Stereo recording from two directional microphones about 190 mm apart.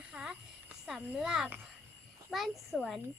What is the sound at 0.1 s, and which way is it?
A child's voice, 5° right (ahead or behind).